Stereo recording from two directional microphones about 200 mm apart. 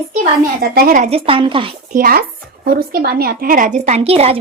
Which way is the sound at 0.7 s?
45° right (ahead or behind).